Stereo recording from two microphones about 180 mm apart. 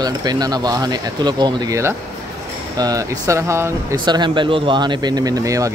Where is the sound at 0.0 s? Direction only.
20° right (ahead or behind).